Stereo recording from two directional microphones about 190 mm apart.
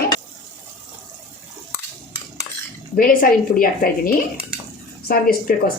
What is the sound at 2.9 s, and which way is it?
A woman's voice, 45° left (ahead or behind).